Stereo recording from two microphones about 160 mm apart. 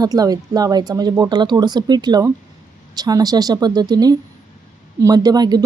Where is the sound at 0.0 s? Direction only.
25° right (ahead or behind).